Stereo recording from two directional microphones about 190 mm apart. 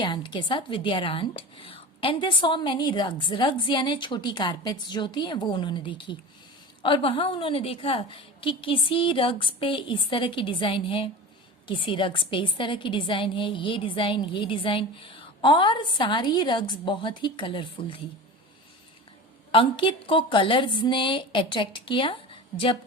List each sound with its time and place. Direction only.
0.0 s a woman's voice: 25° left (ahead or behind)
19.5 s a woman's voice: 25° left (ahead or behind)